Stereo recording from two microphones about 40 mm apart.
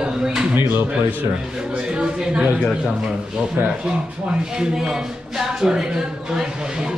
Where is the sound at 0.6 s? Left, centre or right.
Right.